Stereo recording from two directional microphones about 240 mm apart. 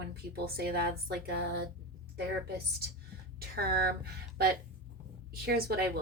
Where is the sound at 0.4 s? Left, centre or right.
Right.